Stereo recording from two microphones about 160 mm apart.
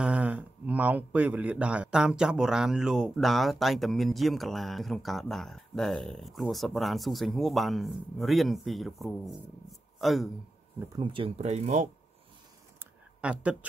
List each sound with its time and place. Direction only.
0.0 s speech: 10° right (ahead or behind)
11.0 s speech: 30° right (ahead or behind); by 11.9 s 45° right (ahead or behind)
12.7 s a sound: 5° right (ahead or behind)